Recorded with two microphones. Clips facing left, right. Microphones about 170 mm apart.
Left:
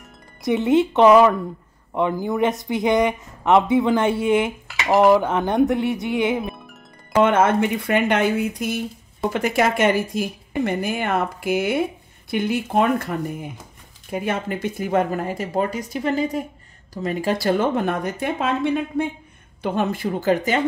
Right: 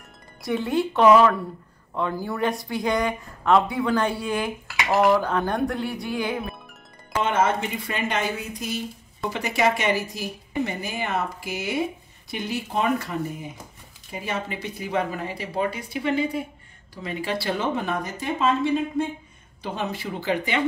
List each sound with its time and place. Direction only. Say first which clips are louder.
0.4 s speech: left 6 dB; 20° left (ahead or behind)
7.2 s a woman's voice: left 3 dB; 60° left (ahead or behind)